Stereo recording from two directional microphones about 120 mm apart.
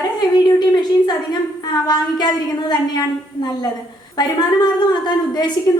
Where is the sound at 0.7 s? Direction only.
35° left (ahead or behind).